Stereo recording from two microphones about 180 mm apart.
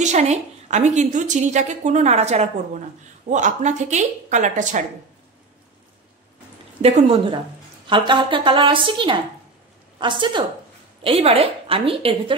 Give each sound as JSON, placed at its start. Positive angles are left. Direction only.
{"t": 0.0, "sound": "a woman's voice", "side_deg": -40}
{"t": 6.8, "sound": "a woman's voice", "side_deg": -35}